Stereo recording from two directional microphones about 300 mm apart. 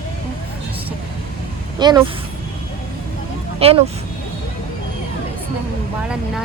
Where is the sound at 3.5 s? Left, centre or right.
Centre.